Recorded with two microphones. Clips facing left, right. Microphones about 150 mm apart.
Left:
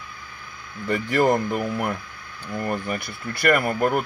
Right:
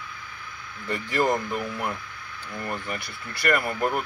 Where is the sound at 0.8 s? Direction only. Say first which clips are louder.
Left 5 dB; 50° left (ahead or behind).